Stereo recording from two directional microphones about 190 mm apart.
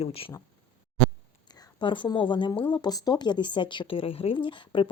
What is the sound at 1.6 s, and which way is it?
A woman's voice, 25° left (ahead or behind).